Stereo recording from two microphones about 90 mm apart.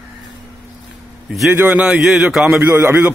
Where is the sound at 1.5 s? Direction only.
25° right (ahead or behind).